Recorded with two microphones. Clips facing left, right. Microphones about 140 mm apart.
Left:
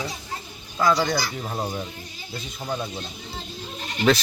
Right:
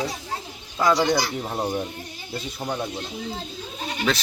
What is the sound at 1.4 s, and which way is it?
Fowl, 20° right (ahead or behind).